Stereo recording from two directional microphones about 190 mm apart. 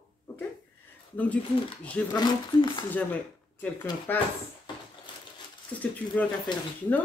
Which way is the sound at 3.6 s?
10° left (ahead or behind).